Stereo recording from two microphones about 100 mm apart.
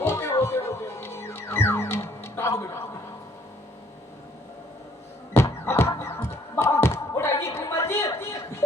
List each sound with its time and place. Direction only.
0.0 s music: 25° left (ahead or behind)
5.3 s music: 25° left (ahead or behind)
6.0 s a sound: 30° left (ahead or behind)